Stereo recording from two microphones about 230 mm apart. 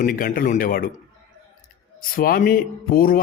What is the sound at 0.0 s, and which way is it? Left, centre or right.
Speech, left.